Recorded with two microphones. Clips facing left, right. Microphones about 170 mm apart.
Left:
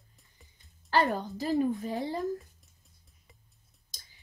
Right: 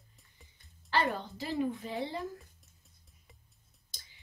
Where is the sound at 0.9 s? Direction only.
45° left (ahead or behind).